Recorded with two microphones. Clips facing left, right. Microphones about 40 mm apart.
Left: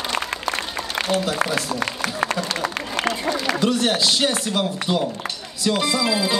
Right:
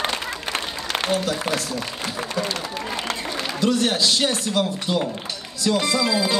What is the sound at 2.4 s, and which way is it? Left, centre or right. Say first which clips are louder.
Run: left 2 dB; left.